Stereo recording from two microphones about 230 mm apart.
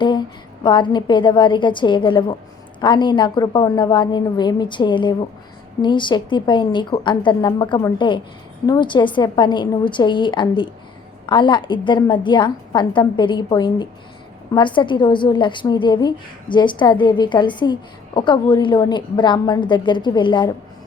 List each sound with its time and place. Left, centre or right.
0.0 s a woman's voice: centre